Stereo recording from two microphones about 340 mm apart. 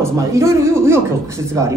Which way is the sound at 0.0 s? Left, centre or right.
Centre.